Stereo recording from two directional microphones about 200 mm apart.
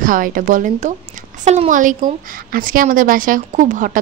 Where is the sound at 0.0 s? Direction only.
45° right (ahead or behind).